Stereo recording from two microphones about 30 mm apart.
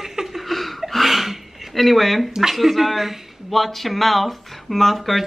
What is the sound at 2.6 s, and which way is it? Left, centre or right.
Speech, centre.